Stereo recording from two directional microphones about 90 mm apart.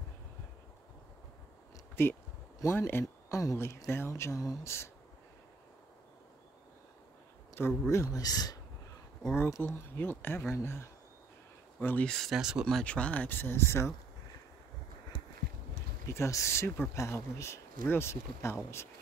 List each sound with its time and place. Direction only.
2.0 s speech: 25° left (ahead or behind)
7.6 s speech: 25° left (ahead or behind)
7.9 s speech: 35° left (ahead or behind)
9.6 s speech: 20° left (ahead or behind)
12.1 s speech: centre (ahead or behind)
12.6 s speech: 10° left (ahead or behind); by 13.9 s 30° left (ahead or behind)
16.1 s speech: 30° left (ahead or behind)